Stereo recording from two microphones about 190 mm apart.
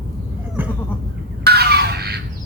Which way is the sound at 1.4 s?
55° right (ahead or behind).